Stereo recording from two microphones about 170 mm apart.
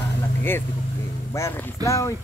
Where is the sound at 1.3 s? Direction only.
15° left (ahead or behind).